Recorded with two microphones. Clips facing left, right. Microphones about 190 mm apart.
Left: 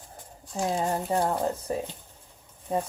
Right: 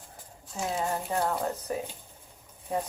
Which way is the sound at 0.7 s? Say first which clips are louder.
Left 3 dB; 35° left (ahead or behind).